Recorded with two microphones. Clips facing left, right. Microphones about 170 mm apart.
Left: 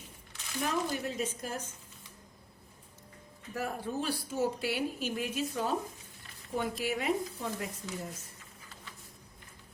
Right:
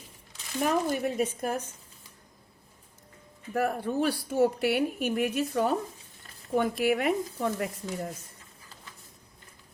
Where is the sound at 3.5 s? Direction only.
60° right (ahead or behind).